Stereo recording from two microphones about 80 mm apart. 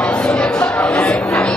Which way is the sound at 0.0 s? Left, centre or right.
Centre.